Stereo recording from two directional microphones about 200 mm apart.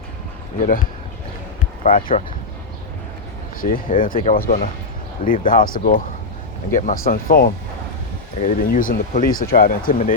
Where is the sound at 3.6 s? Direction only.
40° left (ahead or behind).